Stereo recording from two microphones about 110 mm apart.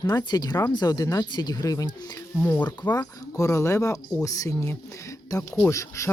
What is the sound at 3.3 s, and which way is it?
Speech, 30° left (ahead or behind).